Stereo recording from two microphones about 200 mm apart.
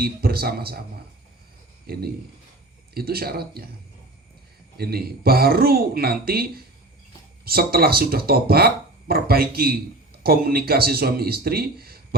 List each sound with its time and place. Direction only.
0.0 s speech: 50° right (ahead or behind)
1.9 s speech: 50° right (ahead or behind)
4.8 s speech: 50° right (ahead or behind)